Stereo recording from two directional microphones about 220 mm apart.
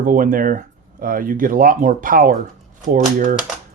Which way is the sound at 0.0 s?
40° right (ahead or behind).